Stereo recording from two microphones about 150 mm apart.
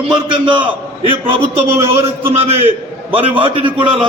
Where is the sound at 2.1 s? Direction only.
40° right (ahead or behind).